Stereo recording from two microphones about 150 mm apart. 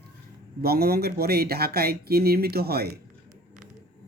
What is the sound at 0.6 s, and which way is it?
Speech, 90° right.